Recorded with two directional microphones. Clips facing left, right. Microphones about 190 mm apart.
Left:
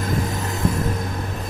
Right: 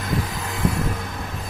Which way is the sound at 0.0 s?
45° left (ahead or behind).